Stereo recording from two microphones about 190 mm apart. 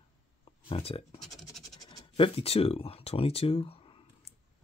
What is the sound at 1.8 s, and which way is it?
Speech, 30° left (ahead or behind).